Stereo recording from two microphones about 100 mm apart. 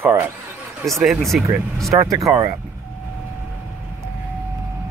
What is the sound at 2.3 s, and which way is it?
Speech, 35° right (ahead or behind).